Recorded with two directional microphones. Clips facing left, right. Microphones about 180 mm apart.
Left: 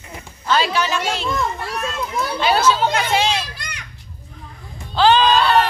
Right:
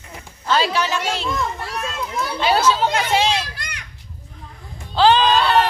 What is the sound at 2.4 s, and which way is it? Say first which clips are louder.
A child's voice: even; 25° right (ahead or behind).